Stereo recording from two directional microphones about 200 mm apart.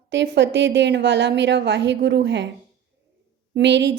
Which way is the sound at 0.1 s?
60° right (ahead or behind).